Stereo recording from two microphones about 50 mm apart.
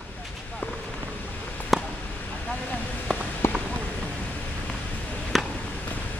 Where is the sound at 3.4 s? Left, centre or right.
Left.